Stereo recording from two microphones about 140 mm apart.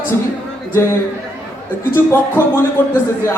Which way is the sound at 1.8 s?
15° left (ahead or behind).